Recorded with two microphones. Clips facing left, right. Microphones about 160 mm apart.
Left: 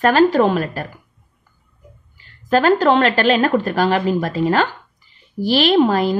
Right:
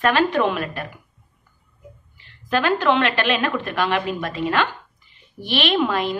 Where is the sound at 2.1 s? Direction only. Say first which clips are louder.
Left 6 dB; 40° left (ahead or behind).